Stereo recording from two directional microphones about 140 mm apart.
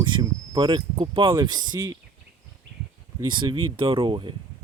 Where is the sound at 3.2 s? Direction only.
35° right (ahead or behind).